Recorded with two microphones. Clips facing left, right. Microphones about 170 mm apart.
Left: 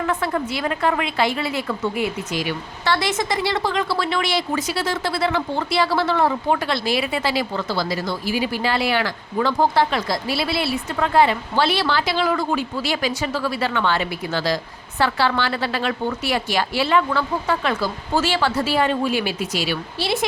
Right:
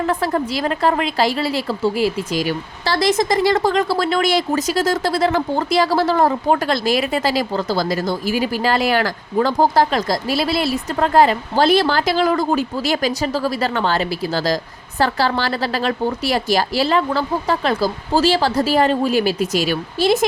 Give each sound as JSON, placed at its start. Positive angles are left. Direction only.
{"t": 0.0, "sound": "a woman's voice", "side_deg": -35}